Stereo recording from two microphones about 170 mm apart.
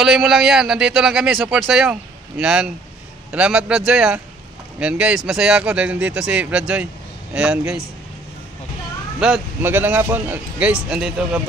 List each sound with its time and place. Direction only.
0.0 s a man's voice: centre (ahead or behind)
9.2 s a man's voice: 10° right (ahead or behind)